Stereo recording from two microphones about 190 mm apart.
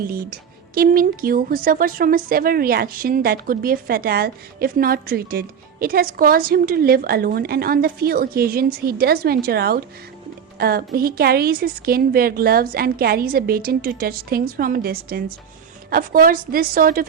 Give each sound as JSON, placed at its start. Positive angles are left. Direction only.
{"t": 0.1, "sound": "speech", "side_deg": -50}